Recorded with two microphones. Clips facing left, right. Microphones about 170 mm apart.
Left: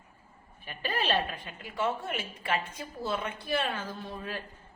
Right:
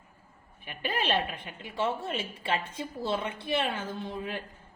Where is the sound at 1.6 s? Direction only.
25° right (ahead or behind).